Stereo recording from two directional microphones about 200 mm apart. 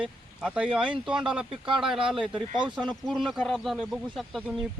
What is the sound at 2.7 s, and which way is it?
Speech, 5° left (ahead or behind).